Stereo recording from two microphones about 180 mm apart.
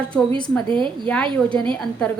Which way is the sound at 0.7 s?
25° right (ahead or behind).